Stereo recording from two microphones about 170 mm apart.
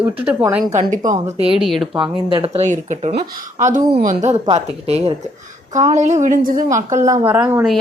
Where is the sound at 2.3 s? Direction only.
35° right (ahead or behind).